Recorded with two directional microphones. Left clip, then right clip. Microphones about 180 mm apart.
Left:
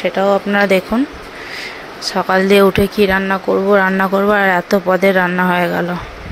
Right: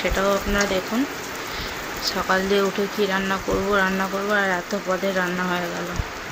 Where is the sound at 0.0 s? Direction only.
30° left (ahead or behind).